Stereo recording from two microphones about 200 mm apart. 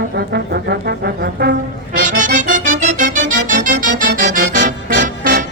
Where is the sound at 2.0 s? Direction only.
40° right (ahead or behind).